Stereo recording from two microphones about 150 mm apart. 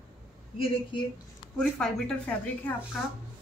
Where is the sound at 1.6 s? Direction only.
5° left (ahead or behind).